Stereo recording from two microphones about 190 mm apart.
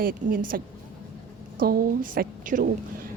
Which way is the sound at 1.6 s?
50° right (ahead or behind).